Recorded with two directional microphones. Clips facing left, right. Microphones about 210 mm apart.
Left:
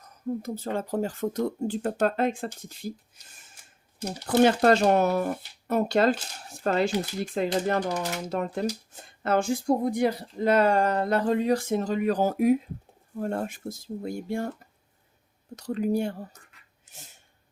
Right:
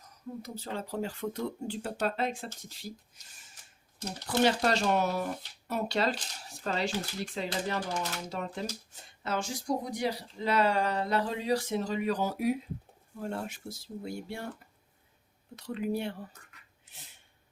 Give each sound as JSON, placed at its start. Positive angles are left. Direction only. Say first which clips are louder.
{"t": 0.4, "sound": "speech", "louder": "left 7 dB", "side_deg": 50}
{"t": 4.0, "sound": "speech", "louder": "left 6 dB", "side_deg": 50}
{"t": 15.5, "sound": "speech", "louder": "left 6 dB", "side_deg": 40}
{"t": 16.9, "sound": "a sound", "louder": "left 5 dB", "side_deg": 45}